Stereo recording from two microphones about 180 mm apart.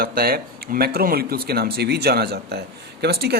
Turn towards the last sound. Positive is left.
turn(degrees=-60)  # may be behind; listen again after turning